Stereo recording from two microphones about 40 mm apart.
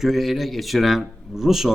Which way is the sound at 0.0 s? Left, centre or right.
Centre.